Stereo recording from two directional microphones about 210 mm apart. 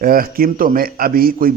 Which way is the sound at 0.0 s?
45° right (ahead or behind).